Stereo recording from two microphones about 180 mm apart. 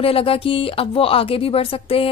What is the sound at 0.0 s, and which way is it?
A woman's voice, 30° left (ahead or behind).